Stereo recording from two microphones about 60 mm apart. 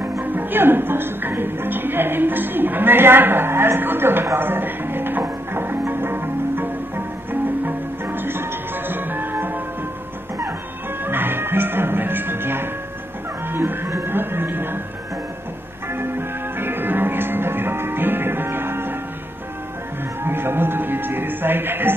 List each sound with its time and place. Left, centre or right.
0.2 s speech: right
7.6 s music: right
11.1 s music: right
15.9 s music: right
20.2 s music: right